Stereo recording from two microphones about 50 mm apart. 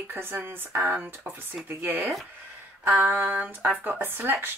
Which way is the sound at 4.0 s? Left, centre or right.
Right.